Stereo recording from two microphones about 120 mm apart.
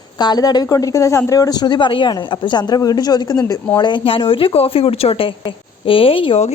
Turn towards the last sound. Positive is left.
turn(degrees=55)  # may be behind; listen again after turning